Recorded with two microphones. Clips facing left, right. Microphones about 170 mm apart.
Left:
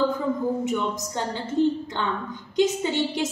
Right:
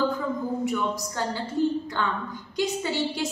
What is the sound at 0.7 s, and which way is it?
A woman's voice, 20° left (ahead or behind).